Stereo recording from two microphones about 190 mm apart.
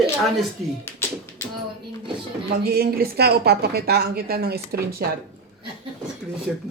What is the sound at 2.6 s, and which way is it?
Speech, 55° right (ahead or behind).